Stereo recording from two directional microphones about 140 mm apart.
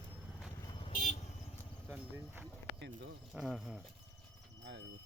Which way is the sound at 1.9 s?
15° right (ahead or behind).